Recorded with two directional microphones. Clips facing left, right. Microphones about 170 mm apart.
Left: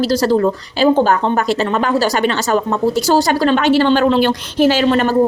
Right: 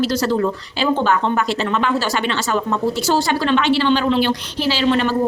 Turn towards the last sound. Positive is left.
turn(degrees=45)  # may be behind; listen again after turning